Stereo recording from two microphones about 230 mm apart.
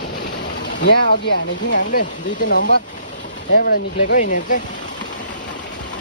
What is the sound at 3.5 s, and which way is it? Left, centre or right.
Speech, left.